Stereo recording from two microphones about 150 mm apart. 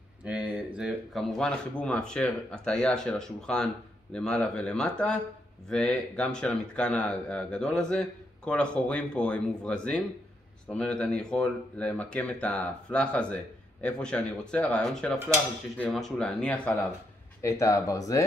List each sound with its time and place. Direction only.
0.2 s a sound: 10° right (ahead or behind)
0.7 s speech: centre (ahead or behind)
17.4 s speech: 20° left (ahead or behind)